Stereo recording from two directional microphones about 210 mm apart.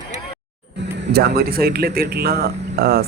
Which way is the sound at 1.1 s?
50° right (ahead or behind).